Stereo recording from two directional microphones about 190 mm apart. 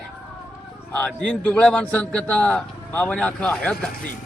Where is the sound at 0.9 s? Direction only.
5° left (ahead or behind).